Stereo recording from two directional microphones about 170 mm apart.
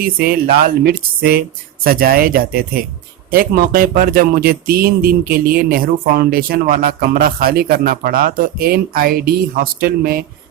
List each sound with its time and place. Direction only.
0.0 s speech: 60° right (ahead or behind)